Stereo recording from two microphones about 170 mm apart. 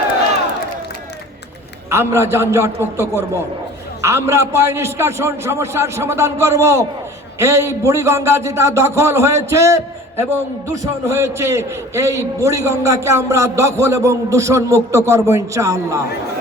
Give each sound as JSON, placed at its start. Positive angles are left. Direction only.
{"t": 1.9, "sound": "a man's voice", "side_deg": -15}
{"t": 4.0, "sound": "a man's voice", "side_deg": -15}